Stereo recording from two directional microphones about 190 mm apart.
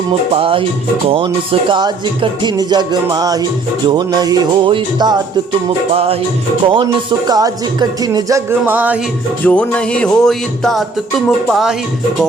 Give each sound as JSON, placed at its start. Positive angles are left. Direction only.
{"t": 0.3, "sound": "music", "side_deg": -30}
{"t": 9.5, "sound": "music", "side_deg": 5}